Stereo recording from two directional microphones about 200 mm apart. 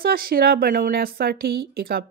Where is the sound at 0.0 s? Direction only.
45° right (ahead or behind).